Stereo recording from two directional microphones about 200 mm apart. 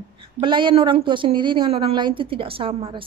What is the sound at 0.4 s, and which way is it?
A woman's voice, 25° right (ahead or behind).